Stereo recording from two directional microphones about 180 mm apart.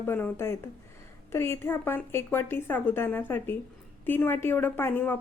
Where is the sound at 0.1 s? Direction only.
15° left (ahead or behind).